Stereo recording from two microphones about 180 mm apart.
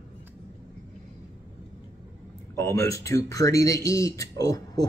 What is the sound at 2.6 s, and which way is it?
Speech, 15° left (ahead or behind).